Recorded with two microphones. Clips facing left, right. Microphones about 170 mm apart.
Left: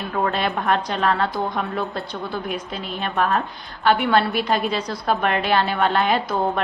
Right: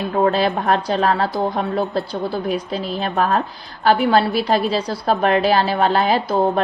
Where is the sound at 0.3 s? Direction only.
35° right (ahead or behind).